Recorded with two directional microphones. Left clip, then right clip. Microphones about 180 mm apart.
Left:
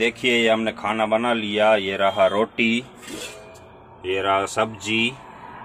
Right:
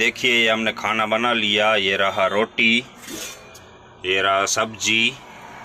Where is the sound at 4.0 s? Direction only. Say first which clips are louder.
Right 2 dB; centre (ahead or behind).